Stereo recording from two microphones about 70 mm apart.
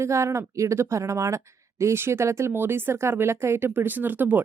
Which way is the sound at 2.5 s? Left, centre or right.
Right.